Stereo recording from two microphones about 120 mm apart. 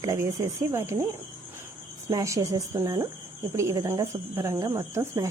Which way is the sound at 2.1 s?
30° right (ahead or behind).